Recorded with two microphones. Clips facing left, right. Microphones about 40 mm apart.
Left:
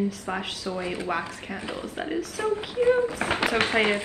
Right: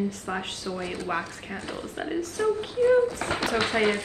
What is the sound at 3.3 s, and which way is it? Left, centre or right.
Speech, left.